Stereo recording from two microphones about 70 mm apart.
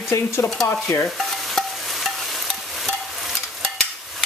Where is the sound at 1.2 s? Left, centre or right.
Centre.